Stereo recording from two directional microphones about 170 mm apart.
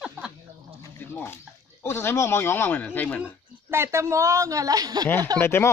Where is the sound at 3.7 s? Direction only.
15° right (ahead or behind).